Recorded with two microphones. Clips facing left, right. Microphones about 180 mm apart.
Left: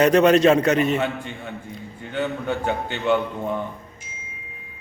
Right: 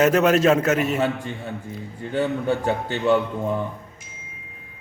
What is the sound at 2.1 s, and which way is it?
A man's voice, 35° right (ahead or behind).